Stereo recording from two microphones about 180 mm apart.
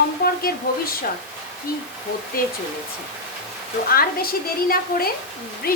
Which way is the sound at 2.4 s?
50° left (ahead or behind).